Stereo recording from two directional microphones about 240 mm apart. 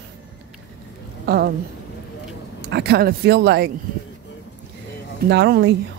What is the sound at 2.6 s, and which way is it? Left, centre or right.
Speech, right.